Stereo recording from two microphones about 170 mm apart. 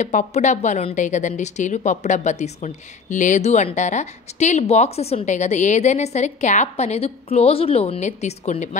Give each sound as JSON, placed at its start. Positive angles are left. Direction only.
{"t": 0.0, "sound": "a woman's voice", "side_deg": 45}